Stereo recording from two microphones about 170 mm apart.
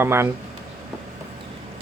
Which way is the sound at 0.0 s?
15° right (ahead or behind).